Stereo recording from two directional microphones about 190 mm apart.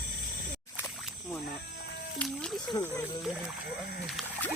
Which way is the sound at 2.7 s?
10° left (ahead or behind).